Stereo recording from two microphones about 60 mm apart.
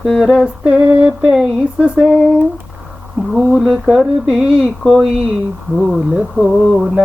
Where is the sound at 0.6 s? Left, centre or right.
Right.